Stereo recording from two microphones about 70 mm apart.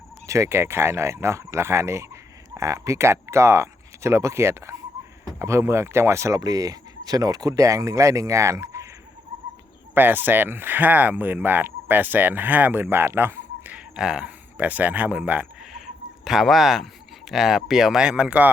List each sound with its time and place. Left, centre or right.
0.3 s speech: right
6.4 s speech: right
9.9 s speech: right
13.7 s speech: centre
16.2 s speech: centre; by 18.5 s right